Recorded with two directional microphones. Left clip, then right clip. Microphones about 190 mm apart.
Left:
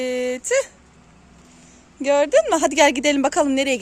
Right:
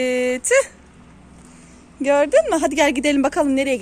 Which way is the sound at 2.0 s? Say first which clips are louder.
Right 1 dB; 15° left (ahead or behind).